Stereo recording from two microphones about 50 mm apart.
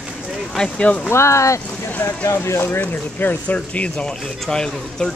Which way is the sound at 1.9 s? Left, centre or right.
Left.